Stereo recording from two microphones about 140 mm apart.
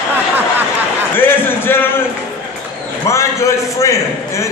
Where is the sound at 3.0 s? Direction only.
20° left (ahead or behind).